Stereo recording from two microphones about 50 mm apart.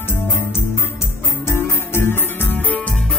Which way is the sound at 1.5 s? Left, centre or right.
Left.